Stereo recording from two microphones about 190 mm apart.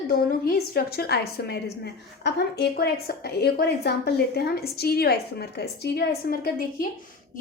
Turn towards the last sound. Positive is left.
turn(degrees=50)  # may be behind; listen again after turning